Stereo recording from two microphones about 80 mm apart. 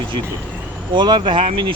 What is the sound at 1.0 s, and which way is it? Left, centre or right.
Speech, right.